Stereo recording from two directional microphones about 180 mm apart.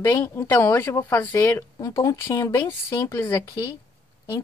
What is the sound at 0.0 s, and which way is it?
A woman's voice, 15° left (ahead or behind).